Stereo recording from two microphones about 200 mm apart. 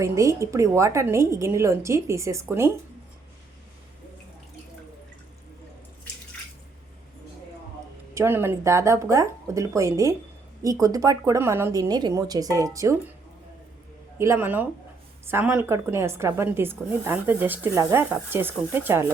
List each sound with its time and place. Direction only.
0.0 s speech: 15° right (ahead or behind)
8.1 s speech: 15° right (ahead or behind)
14.2 s speech: 10° right (ahead or behind)